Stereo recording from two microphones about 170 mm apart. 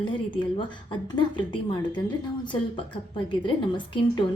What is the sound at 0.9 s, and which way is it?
A woman's voice, 25° left (ahead or behind).